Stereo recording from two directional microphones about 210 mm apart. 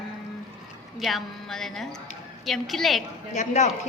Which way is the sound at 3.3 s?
35° left (ahead or behind).